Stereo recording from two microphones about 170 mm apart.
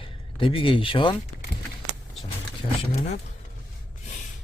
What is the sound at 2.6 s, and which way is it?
Speech, 40° left (ahead or behind).